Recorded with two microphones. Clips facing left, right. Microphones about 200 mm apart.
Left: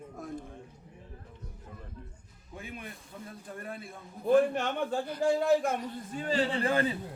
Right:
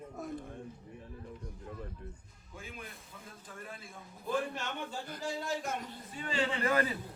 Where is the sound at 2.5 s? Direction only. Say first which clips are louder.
Left 4 dB; 60° left (ahead or behind); by 6.9 s 30° left (ahead or behind).